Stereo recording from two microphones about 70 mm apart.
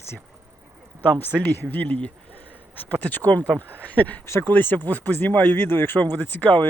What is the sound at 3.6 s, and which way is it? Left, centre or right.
Speech, right.